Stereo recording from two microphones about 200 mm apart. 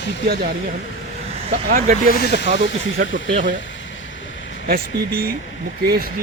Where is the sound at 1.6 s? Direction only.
40° right (ahead or behind).